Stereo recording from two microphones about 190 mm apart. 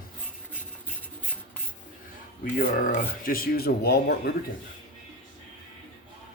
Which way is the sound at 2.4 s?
50° left (ahead or behind).